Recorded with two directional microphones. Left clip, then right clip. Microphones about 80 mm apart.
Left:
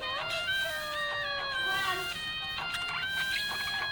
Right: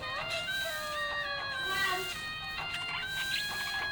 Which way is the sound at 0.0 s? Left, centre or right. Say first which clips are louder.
Left 2 dB; left.